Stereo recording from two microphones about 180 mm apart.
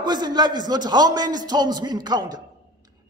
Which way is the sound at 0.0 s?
25° right (ahead or behind).